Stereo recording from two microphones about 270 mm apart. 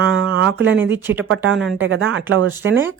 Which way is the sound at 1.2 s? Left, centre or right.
Right.